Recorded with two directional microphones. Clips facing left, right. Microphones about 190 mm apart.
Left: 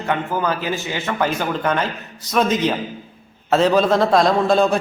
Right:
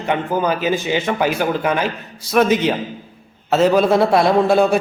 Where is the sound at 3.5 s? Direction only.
10° right (ahead or behind).